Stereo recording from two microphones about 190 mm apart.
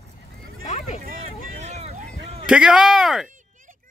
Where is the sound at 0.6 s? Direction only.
40° left (ahead or behind).